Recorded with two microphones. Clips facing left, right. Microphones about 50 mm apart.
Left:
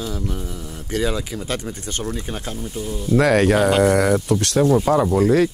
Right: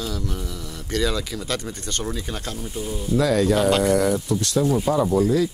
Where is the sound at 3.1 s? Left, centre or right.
Left.